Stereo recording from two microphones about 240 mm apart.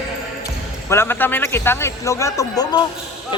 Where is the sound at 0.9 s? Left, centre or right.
Centre.